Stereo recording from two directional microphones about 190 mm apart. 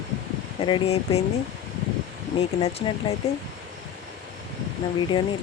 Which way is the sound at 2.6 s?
30° left (ahead or behind).